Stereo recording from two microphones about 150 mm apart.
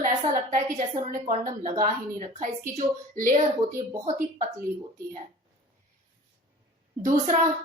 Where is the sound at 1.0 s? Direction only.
50° right (ahead or behind).